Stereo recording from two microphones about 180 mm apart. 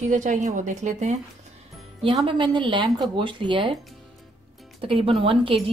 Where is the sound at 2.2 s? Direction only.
25° right (ahead or behind).